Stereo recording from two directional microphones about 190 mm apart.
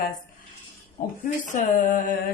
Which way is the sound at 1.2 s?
45° left (ahead or behind).